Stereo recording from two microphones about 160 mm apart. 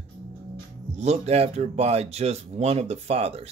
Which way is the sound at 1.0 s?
40° right (ahead or behind).